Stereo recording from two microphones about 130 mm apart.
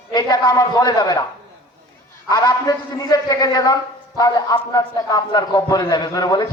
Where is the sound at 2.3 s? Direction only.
30° left (ahead or behind).